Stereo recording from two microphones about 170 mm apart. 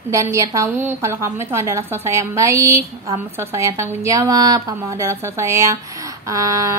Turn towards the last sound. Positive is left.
turn(degrees=-20)  # may be behind; listen again after turning